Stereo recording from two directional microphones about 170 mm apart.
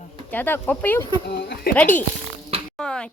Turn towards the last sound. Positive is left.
turn(degrees=5)  # may be behind; listen again after turning